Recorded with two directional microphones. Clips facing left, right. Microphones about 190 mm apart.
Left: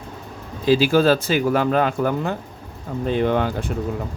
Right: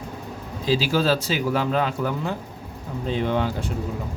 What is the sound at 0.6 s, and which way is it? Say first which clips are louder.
Speech: left 6 dB; 55° left (ahead or behind).